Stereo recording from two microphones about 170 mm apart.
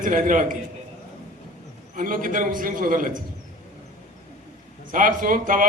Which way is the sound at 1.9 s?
55° right (ahead or behind).